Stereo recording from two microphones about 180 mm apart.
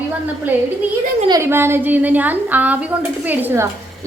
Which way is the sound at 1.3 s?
15° right (ahead or behind).